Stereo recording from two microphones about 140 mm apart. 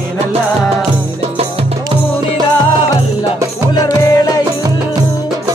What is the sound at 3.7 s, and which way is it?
Music, 30° left (ahead or behind).